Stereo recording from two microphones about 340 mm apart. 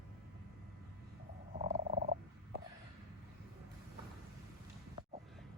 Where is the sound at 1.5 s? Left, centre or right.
Right.